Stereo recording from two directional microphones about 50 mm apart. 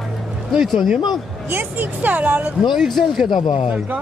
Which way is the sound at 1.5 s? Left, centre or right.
Right.